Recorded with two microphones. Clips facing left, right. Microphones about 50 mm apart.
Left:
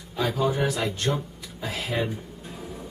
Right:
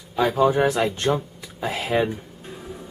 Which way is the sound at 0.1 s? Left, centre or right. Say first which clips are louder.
Right 6 dB; right.